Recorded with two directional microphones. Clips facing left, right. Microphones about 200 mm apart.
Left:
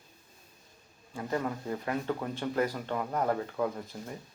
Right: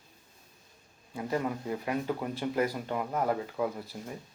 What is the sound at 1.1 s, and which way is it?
Speech, 15° right (ahead or behind).